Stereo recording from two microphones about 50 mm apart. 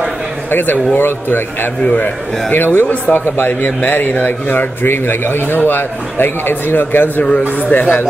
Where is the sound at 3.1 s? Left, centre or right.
Left.